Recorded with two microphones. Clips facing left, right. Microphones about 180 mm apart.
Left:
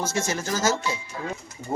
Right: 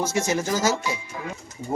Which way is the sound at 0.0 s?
15° right (ahead or behind).